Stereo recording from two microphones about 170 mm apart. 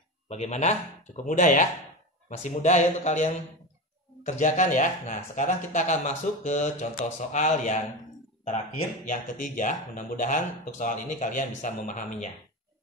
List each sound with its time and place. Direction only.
0.3 s speech: 40° left (ahead or behind)
9.0 s speech: 50° left (ahead or behind)